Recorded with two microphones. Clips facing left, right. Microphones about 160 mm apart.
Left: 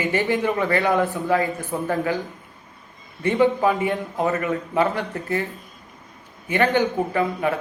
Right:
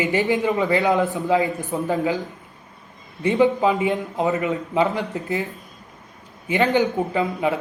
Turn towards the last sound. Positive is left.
turn(degrees=-15)  # may be behind; listen again after turning